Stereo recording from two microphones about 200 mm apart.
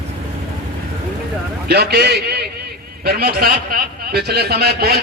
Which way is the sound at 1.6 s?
55° right (ahead or behind).